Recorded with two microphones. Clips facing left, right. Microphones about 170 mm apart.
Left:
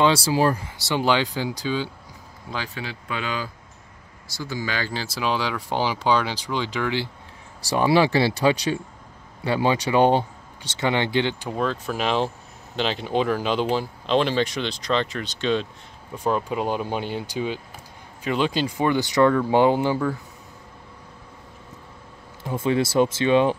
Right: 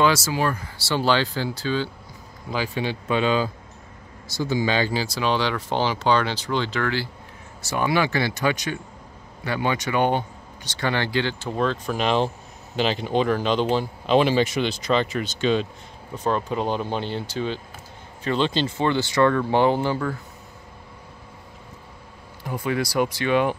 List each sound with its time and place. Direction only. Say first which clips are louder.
0.0 s speech: left 2 dB; 30° left (ahead or behind)
0.7 s speech: right 4 dB; 15° left (ahead or behind)
2.7 s speech: right 7 dB; 25° right (ahead or behind)
4.9 s speech: right 2 dB; 5° left (ahead or behind)
7.7 s speech: left 4 dB; 30° left (ahead or behind); by 20.2 s 15° left (ahead or behind)
22.4 s speech: left 3 dB; 25° left (ahead or behind)